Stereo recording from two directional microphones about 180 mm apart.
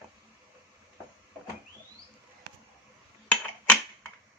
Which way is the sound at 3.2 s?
10° left (ahead or behind).